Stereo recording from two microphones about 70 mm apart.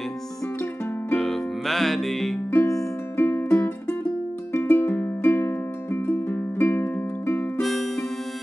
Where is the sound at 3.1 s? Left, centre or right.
Left.